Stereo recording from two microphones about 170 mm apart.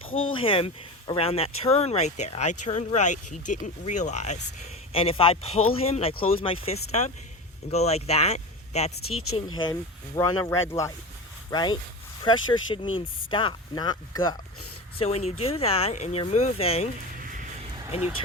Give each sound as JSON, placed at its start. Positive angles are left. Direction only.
{"t": 0.0, "sound": "speech", "side_deg": 30}
{"t": 10.2, "sound": "speech", "side_deg": 20}
{"t": 14.9, "sound": "speech", "side_deg": 35}